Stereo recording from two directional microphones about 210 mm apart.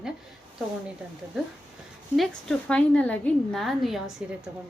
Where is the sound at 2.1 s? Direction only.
Centre (ahead or behind).